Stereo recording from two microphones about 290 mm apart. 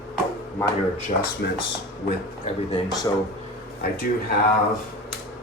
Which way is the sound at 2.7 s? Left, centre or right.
Centre.